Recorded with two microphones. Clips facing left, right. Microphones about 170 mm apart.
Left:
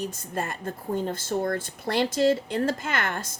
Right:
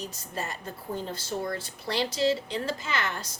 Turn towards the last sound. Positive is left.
turn(degrees=50)  # may be behind; listen again after turning